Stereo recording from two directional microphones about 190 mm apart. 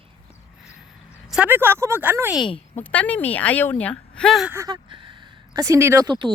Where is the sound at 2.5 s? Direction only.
30° left (ahead or behind).